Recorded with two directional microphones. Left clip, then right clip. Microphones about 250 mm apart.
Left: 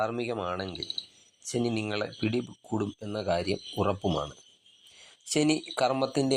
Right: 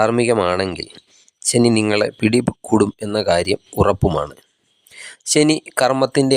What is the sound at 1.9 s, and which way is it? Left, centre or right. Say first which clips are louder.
Speech: right 14 dB; right.